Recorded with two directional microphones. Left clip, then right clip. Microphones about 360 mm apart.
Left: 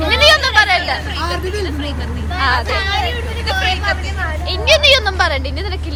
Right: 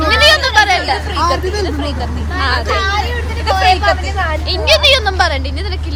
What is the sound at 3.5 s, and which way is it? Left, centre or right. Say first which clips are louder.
Speech: right 6 dB; centre.